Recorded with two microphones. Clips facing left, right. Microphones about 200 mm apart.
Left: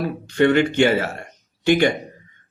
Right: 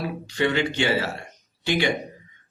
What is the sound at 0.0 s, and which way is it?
Speech, 55° left (ahead or behind).